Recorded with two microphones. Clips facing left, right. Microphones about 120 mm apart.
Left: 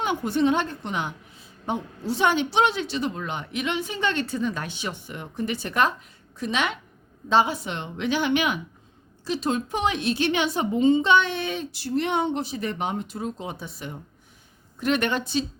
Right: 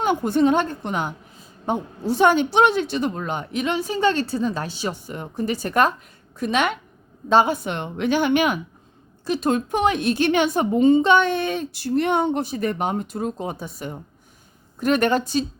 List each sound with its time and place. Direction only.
0.0 s a woman's voice: 45° right (ahead or behind)